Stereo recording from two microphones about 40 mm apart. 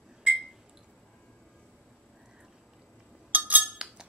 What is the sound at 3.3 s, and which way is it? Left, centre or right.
Chink, right.